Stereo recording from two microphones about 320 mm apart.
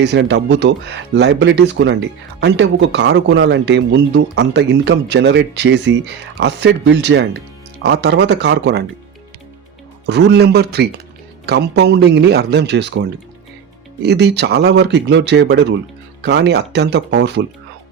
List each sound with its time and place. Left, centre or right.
0.0 s speech: right
10.1 s speech: right
14.0 s speech: right